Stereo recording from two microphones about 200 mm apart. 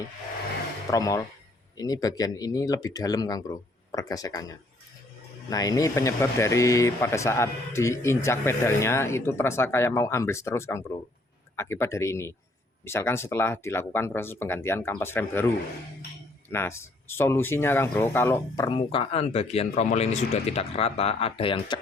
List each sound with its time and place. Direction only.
0.9 s speech: 15° left (ahead or behind)
5.5 s speech: 20° left (ahead or behind)
16.5 s speech: 10° left (ahead or behind)
18.7 s speech: 25° left (ahead or behind)